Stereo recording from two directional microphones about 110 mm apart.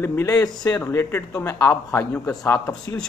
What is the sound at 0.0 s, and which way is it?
A man's voice, 20° left (ahead or behind).